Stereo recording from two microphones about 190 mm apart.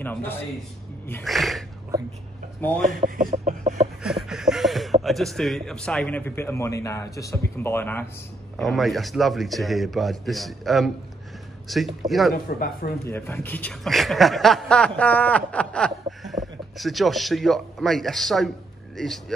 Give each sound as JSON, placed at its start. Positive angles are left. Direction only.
{"t": 0.0, "sound": "a man's voice", "side_deg": 10}
{"t": 3.0, "sound": "a sound", "side_deg": -45}
{"t": 4.0, "sound": "a sound", "side_deg": 0}
{"t": 5.0, "sound": "a man's voice", "side_deg": 0}
{"t": 8.5, "sound": "a man's voice", "side_deg": 0}
{"t": 12.5, "sound": "speech", "side_deg": 50}
{"t": 13.0, "sound": "a man's voice", "side_deg": 10}